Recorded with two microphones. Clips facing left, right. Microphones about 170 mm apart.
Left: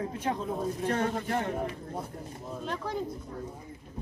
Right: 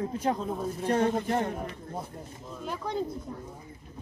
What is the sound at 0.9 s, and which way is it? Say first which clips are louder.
Speech: right 7 dB; 30° right (ahead or behind).